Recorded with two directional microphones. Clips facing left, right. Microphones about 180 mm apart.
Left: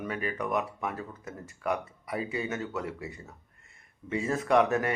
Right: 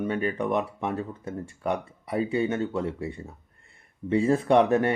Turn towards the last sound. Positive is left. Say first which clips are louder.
# right 4 dB
turn(degrees=-30)  # may be behind; listen again after turning